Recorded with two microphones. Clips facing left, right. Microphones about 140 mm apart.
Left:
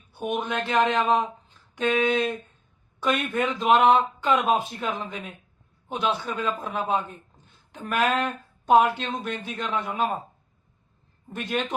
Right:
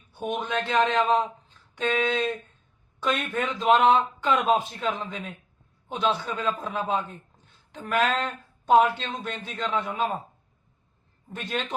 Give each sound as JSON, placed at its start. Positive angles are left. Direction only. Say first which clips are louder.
{"t": 0.1, "sound": "a man's voice", "louder": "left 1 dB", "side_deg": 5}
{"t": 11.3, "sound": "a man's voice", "louder": "left 3 dB", "side_deg": 5}